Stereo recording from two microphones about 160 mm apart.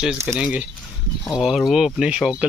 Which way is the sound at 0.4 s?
5° right (ahead or behind).